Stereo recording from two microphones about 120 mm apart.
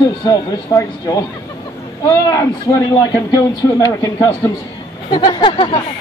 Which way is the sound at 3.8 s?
25° left (ahead or behind).